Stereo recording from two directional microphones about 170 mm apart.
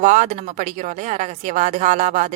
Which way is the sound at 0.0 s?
45° right (ahead or behind).